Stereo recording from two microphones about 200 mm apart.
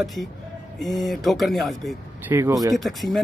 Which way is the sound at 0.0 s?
Centre (ahead or behind).